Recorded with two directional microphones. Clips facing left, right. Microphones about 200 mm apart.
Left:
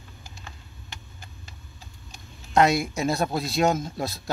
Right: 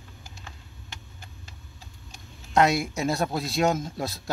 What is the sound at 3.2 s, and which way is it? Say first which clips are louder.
Speech: left 1 dB; 15° left (ahead or behind).